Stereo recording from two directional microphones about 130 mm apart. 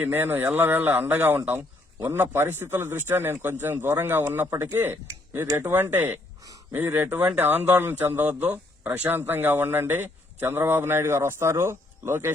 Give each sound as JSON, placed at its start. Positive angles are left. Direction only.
{"t": 0.0, "sound": "speech", "side_deg": -15}
{"t": 6.4, "sound": "a sound", "side_deg": -25}
{"t": 6.7, "sound": "speech", "side_deg": -15}